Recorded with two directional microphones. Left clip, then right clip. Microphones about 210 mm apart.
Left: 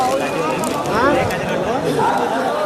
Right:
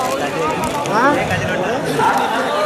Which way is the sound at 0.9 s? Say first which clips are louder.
Right 2 dB; 35° right (ahead or behind).